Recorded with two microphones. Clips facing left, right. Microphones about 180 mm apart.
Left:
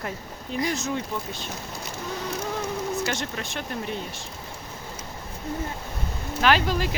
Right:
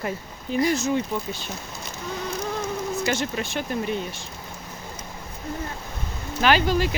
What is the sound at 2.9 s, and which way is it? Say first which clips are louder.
Speech: right 3 dB; centre (ahead or behind).